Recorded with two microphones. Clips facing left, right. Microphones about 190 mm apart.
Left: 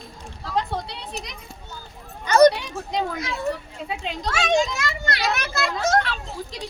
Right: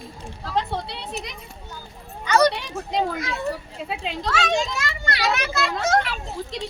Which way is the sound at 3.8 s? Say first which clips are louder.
Right 1 dB; centre (ahead or behind).